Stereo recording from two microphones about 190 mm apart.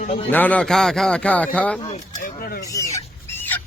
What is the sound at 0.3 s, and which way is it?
Speech, 10° left (ahead or behind).